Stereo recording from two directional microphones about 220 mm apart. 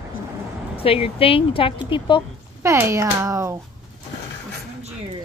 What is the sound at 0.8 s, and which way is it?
Speech, 25° left (ahead or behind).